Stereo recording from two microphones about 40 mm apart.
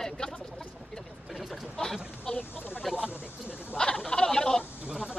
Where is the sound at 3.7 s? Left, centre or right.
Centre.